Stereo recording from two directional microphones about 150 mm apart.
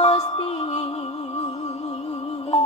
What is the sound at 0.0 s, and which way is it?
Music, 40° left (ahead or behind).